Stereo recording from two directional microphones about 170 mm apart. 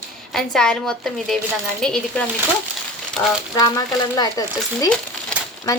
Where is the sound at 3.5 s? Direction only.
20° left (ahead or behind).